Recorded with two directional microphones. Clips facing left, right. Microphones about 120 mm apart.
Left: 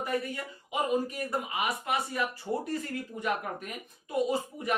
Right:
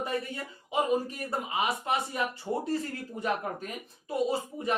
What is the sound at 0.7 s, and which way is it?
A man's voice, 30° right (ahead or behind).